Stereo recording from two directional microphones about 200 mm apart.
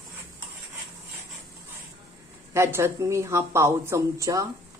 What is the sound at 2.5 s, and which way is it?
Speech, 15° right (ahead or behind).